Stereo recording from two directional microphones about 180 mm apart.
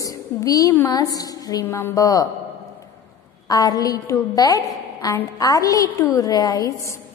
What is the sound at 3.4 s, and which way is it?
A woman's voice, 20° left (ahead or behind).